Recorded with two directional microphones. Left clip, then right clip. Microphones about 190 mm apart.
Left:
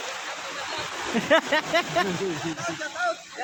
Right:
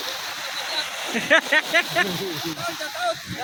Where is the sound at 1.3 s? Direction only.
15° left (ahead or behind).